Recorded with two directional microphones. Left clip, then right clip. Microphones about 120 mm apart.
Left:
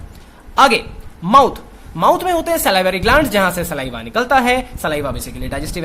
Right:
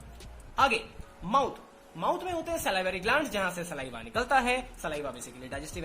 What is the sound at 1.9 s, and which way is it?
A woman's voice, 90° left.